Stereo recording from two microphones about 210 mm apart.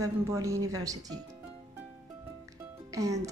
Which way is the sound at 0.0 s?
15° right (ahead or behind).